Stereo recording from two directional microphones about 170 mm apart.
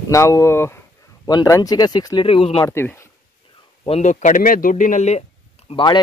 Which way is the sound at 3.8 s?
40° left (ahead or behind).